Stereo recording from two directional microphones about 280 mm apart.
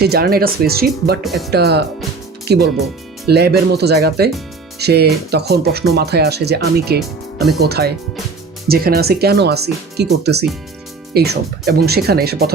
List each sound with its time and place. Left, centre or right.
0.0 s speech: right
1.2 s speech: centre
1.5 s speech: right